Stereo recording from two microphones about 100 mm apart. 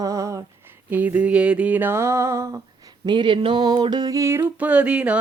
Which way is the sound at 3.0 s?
50° right (ahead or behind).